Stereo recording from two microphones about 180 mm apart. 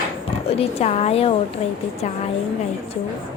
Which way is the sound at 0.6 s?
35° left (ahead or behind).